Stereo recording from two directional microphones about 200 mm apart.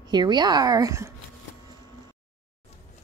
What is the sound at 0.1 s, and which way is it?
Speech, 20° right (ahead or behind).